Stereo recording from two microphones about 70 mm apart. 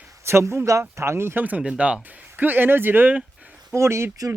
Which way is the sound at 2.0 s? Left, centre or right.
Right.